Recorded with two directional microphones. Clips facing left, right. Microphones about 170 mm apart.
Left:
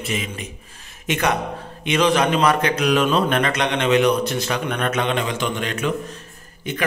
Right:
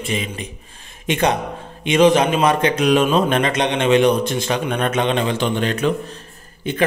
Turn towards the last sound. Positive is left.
turn(degrees=-30)  # may be behind; listen again after turning